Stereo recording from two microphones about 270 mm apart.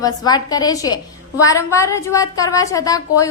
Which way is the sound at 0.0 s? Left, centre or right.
Centre.